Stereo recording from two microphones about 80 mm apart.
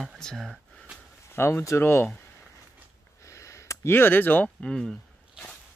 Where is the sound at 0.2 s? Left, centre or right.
Centre.